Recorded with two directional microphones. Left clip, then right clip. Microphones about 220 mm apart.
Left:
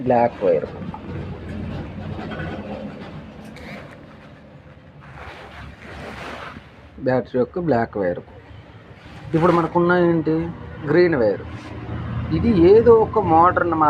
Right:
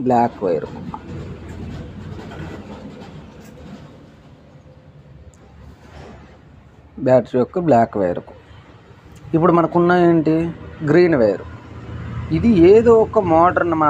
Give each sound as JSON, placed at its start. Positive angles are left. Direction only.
{"t": 0.1, "sound": "speech", "side_deg": -50}
{"t": 7.0, "sound": "speech", "side_deg": -50}
{"t": 9.3, "sound": "speech", "side_deg": -50}